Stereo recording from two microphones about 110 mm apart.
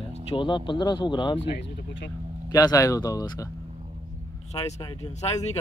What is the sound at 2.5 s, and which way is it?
Speech, 35° left (ahead or behind).